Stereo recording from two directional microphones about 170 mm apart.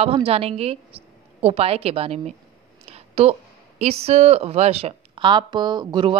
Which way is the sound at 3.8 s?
40° right (ahead or behind).